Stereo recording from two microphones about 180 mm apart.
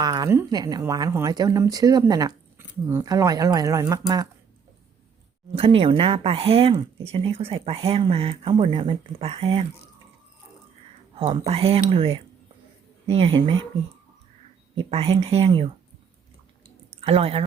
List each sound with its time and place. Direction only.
0.0 s speech: 20° right (ahead or behind)
5.5 s speech: 30° right (ahead or behind)
11.2 s speech: 30° right (ahead or behind)
14.8 s speech: 35° right (ahead or behind)
17.0 s speech: 35° right (ahead or behind)